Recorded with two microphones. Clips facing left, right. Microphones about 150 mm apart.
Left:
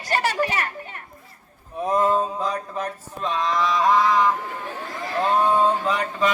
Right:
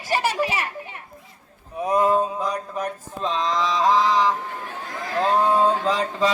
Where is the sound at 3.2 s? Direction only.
25° right (ahead or behind).